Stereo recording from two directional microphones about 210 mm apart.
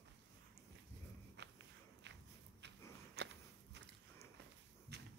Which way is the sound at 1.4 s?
55° right (ahead or behind).